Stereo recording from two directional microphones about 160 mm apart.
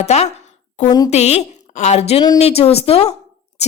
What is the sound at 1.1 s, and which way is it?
A woman's voice, 40° left (ahead or behind).